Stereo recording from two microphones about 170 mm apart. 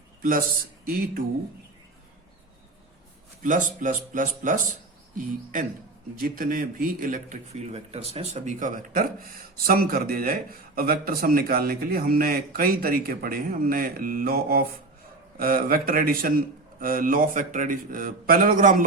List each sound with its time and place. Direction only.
0.2 s a man's voice: 55° right (ahead or behind)
3.4 s a man's voice: 50° right (ahead or behind)